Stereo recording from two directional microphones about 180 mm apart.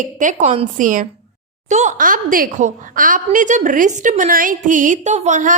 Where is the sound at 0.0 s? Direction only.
45° right (ahead or behind).